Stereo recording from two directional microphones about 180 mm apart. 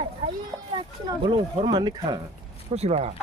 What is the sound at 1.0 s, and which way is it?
Speech, 25° right (ahead or behind).